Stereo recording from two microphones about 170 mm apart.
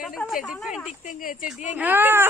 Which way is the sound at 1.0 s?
55° left (ahead or behind).